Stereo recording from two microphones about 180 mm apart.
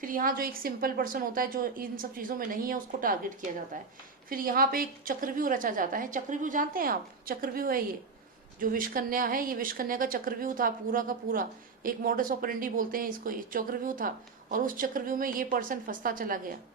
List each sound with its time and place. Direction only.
0.0 s speech: 50° right (ahead or behind)